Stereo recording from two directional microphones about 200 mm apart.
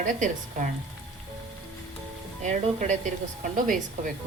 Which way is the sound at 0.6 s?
40° right (ahead or behind).